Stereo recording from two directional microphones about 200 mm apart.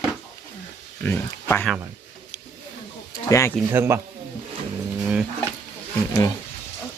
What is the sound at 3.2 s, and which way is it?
Speech, 15° left (ahead or behind).